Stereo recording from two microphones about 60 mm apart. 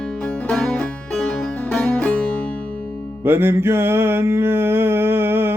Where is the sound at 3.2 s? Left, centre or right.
Right.